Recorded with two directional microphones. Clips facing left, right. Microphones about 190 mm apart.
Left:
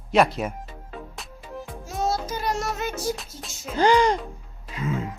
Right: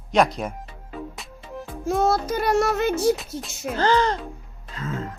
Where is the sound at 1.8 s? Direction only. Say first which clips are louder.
Right 6 dB; 55° right (ahead or behind).